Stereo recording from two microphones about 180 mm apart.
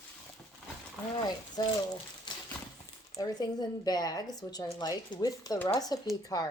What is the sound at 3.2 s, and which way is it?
Speech, 20° left (ahead or behind).